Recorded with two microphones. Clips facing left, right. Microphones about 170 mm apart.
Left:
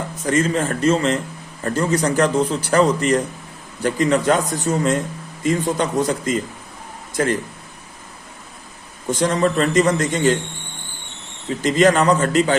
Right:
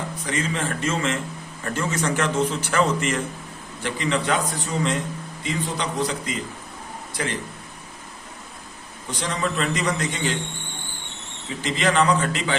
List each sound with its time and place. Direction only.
0.2 s a man's voice: 45° left (ahead or behind)
9.0 s a man's voice: 45° left (ahead or behind)
11.4 s a man's voice: 45° left (ahead or behind)